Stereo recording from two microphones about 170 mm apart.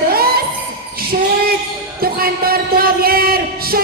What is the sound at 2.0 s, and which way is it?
Music, 60° right (ahead or behind).